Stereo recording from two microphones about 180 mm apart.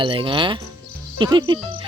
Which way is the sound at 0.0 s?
30° right (ahead or behind).